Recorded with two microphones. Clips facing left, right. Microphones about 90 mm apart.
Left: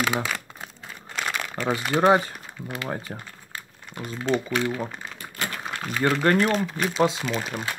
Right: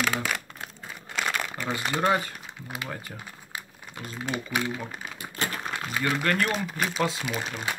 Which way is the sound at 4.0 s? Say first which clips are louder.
Left 7 dB; 10° right (ahead or behind).